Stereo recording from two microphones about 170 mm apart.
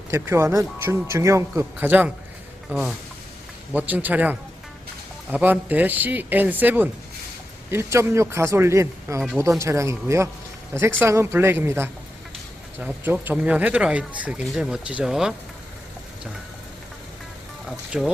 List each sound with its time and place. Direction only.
0.1 s speech: 15° right (ahead or behind)
17.7 s speech: centre (ahead or behind)